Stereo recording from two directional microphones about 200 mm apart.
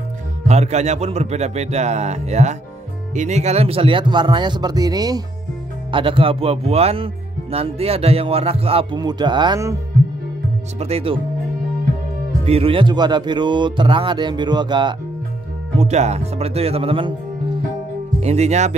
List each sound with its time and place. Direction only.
0.5 s a man's voice: 35° right (ahead or behind); by 9.8 s 20° right (ahead or behind)
10.8 s speech: 30° right (ahead or behind)
12.4 s speech: 30° right (ahead or behind)
15.8 s a man's voice: 35° right (ahead or behind)
18.2 s a man's voice: 35° right (ahead or behind)